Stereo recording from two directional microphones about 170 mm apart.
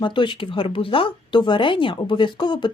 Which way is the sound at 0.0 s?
30° left (ahead or behind).